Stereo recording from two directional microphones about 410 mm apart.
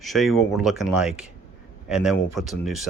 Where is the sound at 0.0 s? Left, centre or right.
Centre.